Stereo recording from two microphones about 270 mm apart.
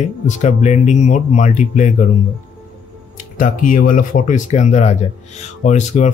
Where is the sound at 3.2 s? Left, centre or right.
Left.